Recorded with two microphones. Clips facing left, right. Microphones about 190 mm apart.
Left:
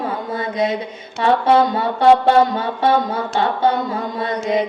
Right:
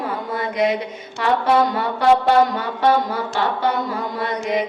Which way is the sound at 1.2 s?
25° left (ahead or behind).